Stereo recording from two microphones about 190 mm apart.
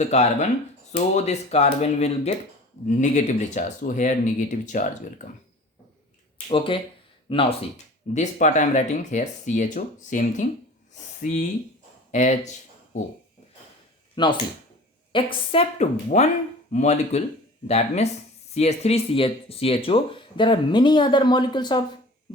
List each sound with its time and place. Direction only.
0.0 s speech: 35° left (ahead or behind)
6.5 s speech: 25° left (ahead or behind)
8.1 s speech: 40° left (ahead or behind)
14.2 s speech: 25° left (ahead or behind)